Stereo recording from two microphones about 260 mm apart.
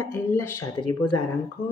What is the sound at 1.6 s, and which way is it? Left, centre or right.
Speech, left.